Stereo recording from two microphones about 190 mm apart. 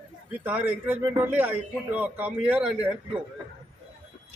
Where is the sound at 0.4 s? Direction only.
10° right (ahead or behind).